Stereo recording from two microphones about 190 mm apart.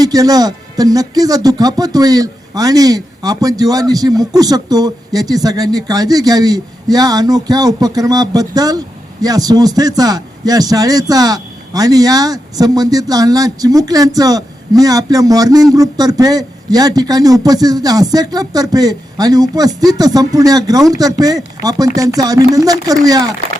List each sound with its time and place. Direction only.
0.0 s a man's voice: 20° right (ahead or behind)